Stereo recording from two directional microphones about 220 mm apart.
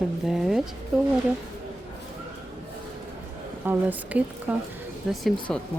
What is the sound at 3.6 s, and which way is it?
Speech, 10° right (ahead or behind).